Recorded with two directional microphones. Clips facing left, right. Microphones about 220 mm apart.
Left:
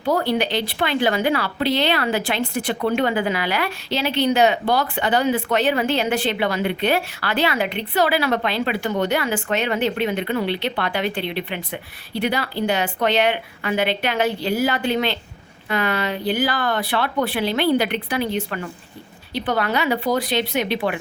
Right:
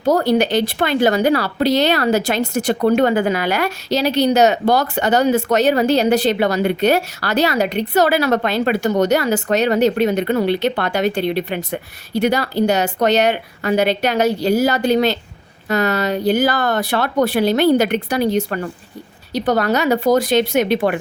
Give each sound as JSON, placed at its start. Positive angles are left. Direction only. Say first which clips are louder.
{"t": 0.0, "sound": "speech", "louder": "right 5 dB", "side_deg": -45}